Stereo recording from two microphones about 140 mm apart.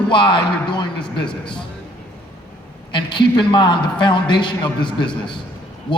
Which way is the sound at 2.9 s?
35° left (ahead or behind).